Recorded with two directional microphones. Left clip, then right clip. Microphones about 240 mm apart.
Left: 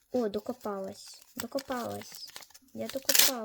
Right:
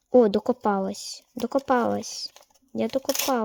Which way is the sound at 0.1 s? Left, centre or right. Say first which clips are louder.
Right 13 dB; right.